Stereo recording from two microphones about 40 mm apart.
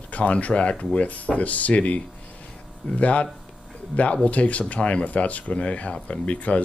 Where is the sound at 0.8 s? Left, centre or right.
Left.